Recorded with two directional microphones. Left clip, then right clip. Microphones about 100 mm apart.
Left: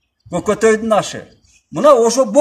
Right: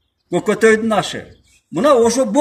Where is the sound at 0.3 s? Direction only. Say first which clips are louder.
Right 1 dB; 40° left (ahead or behind).